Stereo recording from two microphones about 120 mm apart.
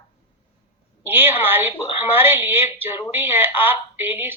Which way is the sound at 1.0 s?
20° right (ahead or behind).